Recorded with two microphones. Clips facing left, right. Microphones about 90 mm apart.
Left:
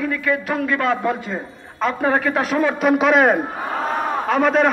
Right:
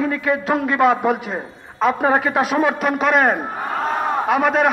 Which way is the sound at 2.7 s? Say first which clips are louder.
Left 2 dB; centre (ahead or behind).